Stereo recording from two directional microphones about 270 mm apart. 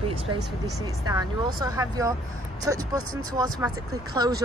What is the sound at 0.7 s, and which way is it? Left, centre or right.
Speech, centre.